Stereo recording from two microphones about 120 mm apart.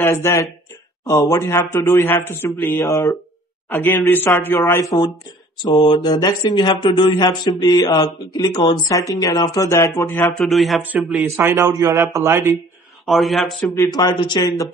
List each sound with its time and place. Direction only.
0.0 s a man's voice: 20° left (ahead or behind)
5.6 s speech: 40° left (ahead or behind); by 10.3 s 25° left (ahead or behind)
10.3 s a man's voice: centre (ahead or behind)
11.2 s a man's voice: 20° right (ahead or behind)
13.0 s a man's voice: centre (ahead or behind)
13.9 s speech: 35° left (ahead or behind)